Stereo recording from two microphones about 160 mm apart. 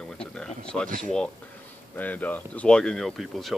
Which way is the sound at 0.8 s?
55° right (ahead or behind).